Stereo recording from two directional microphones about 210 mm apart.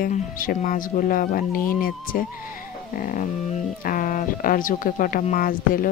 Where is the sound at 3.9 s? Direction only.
40° left (ahead or behind).